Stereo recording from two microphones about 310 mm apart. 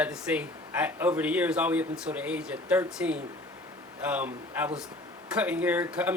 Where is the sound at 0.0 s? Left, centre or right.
Centre.